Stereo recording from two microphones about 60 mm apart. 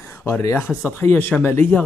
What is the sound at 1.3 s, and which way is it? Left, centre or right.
Speech, left.